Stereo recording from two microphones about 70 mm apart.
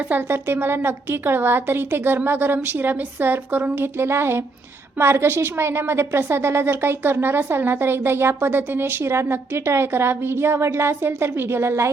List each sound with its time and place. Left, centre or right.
0.1 s a woman's voice: right